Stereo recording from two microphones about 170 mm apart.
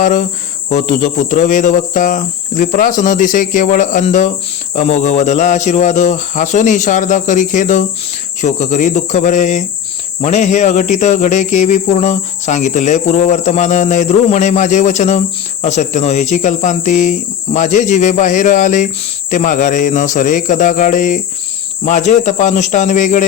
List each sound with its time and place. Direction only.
0.0 s speech: 50° left (ahead or behind)